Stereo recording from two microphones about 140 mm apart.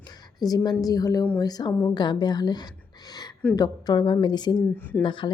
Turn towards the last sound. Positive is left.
turn(degrees=35)  # may be behind; listen again after turning